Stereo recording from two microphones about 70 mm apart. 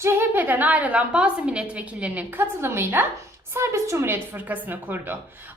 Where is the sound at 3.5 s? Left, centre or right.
Right.